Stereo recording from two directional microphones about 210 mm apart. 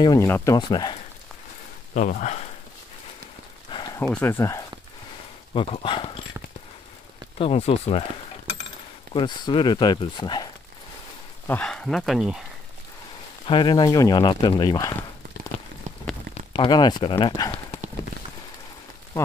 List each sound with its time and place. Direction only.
0.0 s speech: 15° left (ahead or behind)
2.0 s speech: 35° left (ahead or behind)
3.7 s a sound: 15° left (ahead or behind)
4.1 s speech: 10° left (ahead or behind)
7.3 s speech: 30° left (ahead or behind)
9.1 s speech: 20° left (ahead or behind)
11.4 s speech: 5° left (ahead or behind)
13.5 s speech: 20° left (ahead or behind)
16.5 s speech: 20° left (ahead or behind)